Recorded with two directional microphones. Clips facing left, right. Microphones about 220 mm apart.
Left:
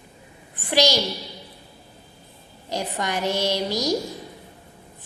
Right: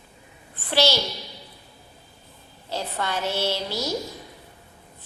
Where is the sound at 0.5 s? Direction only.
15° left (ahead or behind).